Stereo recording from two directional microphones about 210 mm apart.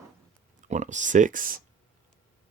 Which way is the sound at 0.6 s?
35° right (ahead or behind).